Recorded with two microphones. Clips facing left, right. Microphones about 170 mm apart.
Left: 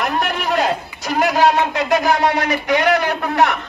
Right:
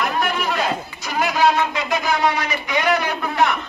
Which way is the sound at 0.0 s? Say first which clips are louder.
Left 1 dB; 65° left (ahead or behind).